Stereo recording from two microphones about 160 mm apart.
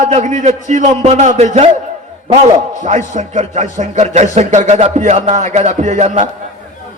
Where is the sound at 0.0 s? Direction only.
45° right (ahead or behind).